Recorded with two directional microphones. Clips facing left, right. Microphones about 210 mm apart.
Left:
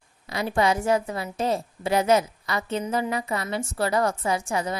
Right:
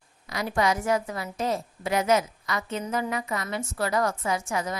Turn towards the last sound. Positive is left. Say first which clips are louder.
# left 2 dB
turn(degrees=30)  # may be behind; listen again after turning